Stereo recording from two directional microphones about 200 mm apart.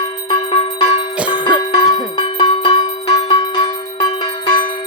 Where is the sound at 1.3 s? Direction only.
25° left (ahead or behind).